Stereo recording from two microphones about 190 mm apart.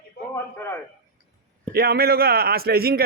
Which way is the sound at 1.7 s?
55° right (ahead or behind).